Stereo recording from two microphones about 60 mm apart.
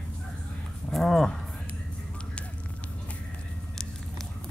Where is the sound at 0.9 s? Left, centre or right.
Centre.